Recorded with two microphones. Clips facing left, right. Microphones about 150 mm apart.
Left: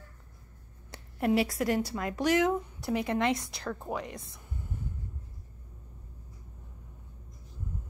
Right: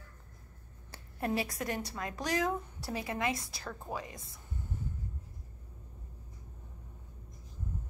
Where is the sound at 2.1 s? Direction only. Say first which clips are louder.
Left 7 dB; 25° left (ahead or behind).